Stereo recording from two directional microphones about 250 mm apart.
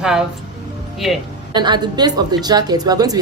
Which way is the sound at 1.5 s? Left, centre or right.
Centre.